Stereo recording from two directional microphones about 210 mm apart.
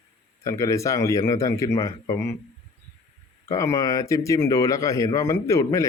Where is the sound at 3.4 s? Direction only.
15° left (ahead or behind).